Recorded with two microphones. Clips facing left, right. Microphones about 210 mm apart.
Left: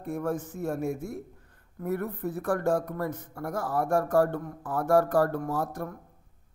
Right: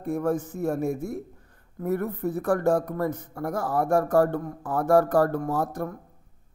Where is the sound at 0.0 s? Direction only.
45° right (ahead or behind).